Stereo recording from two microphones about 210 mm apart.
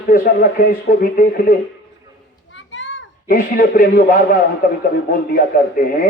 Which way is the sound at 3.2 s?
45° left (ahead or behind).